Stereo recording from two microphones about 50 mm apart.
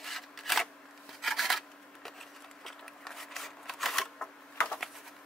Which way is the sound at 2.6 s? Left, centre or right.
Centre.